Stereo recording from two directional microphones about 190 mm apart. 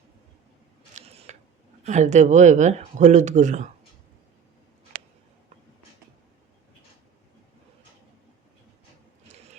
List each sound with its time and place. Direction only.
0.9 s camera: 35° right (ahead or behind)
1.8 s speech: 40° right (ahead or behind)